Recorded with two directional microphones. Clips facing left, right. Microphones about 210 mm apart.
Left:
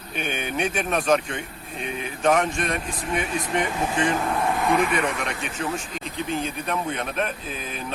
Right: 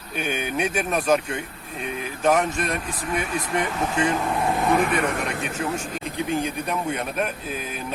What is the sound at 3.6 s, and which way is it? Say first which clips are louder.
Speech: even; 10° left (ahead or behind).